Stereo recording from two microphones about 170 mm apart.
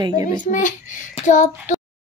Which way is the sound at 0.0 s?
20° right (ahead or behind).